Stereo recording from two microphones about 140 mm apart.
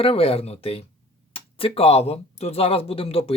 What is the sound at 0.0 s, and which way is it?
Speech, 45° left (ahead or behind).